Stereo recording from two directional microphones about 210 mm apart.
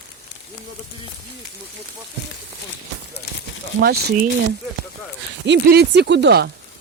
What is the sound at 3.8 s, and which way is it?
Speech, 50° right (ahead or behind).